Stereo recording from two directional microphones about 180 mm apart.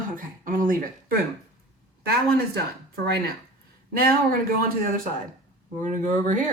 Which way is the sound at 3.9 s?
55° right (ahead or behind).